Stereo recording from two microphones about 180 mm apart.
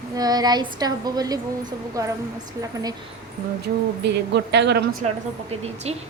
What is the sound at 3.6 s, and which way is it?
Speech, 70° right (ahead or behind).